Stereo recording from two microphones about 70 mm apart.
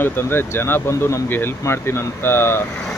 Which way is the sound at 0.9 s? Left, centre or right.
Left.